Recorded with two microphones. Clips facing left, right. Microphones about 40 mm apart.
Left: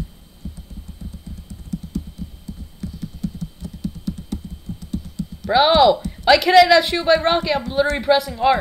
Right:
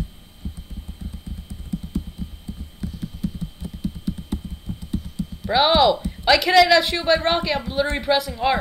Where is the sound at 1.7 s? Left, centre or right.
Centre.